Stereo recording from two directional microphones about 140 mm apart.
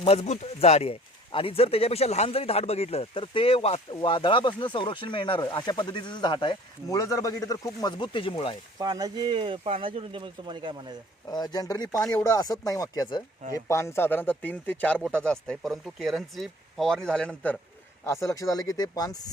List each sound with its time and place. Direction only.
0.0 s speech: 50° left (ahead or behind)
6.9 s speech: 25° left (ahead or behind); by 8.5 s 40° left (ahead or behind)
8.8 s speech: 25° right (ahead or behind)
11.3 s speech: 30° left (ahead or behind); by 17.6 s 10° left (ahead or behind)
18.0 s speech: 20° left (ahead or behind)